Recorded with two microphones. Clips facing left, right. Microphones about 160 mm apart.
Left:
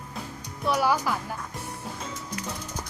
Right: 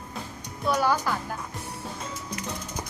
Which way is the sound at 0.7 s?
5° left (ahead or behind).